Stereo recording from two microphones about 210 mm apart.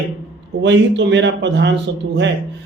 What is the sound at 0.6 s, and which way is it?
A man's voice, 55° right (ahead or behind).